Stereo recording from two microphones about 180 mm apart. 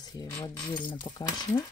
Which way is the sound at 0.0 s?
20° left (ahead or behind).